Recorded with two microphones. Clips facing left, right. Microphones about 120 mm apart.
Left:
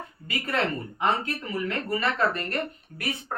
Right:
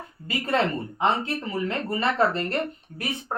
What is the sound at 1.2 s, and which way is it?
A woman's voice, 25° right (ahead or behind).